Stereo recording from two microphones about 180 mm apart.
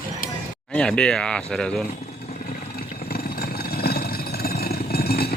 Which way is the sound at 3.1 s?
55° left (ahead or behind).